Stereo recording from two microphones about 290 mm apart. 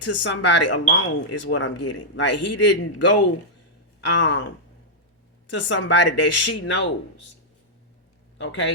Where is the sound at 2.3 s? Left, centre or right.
Left.